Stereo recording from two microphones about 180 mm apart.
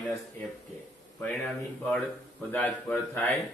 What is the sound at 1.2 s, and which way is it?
Speech, 10° left (ahead or behind).